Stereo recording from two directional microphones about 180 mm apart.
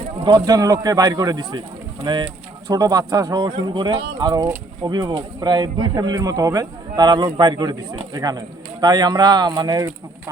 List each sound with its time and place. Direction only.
0.3 s speech: 20° right (ahead or behind)